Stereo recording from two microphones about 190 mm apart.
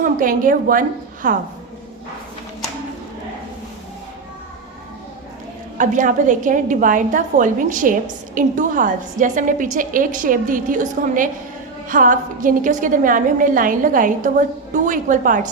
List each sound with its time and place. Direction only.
0.0 s a woman's voice: 45° right (ahead or behind)
5.7 s a woman's voice: 40° right (ahead or behind)